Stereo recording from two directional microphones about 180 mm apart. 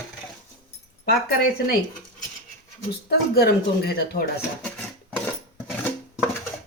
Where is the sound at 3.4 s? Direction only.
60° left (ahead or behind).